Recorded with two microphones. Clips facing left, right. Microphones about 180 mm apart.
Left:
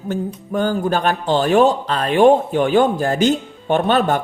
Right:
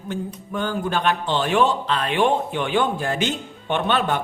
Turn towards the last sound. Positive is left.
turn(degrees=40)  # may be behind; listen again after turning